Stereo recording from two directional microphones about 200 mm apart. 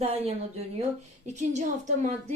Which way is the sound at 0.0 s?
30° right (ahead or behind).